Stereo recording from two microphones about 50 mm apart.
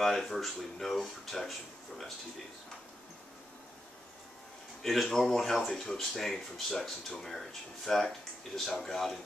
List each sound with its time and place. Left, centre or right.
0.0 s speech: centre
4.8 s speech: centre